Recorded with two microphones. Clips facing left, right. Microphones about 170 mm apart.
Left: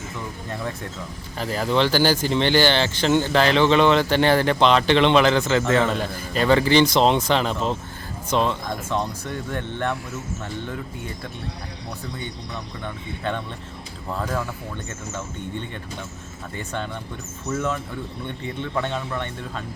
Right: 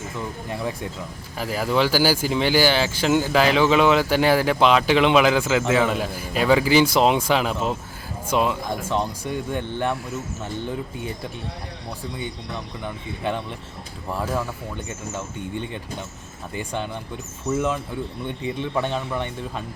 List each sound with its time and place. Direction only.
0.4 s speech: 10° right (ahead or behind)
12.8 s speech: 10° right (ahead or behind)
16.6 s speech: 15° right (ahead or behind)